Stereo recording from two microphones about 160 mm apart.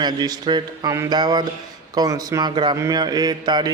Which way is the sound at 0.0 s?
25° right (ahead or behind).